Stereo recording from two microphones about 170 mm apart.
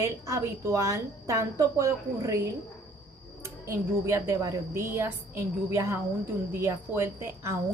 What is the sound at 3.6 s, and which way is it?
A woman's voice, 15° right (ahead or behind).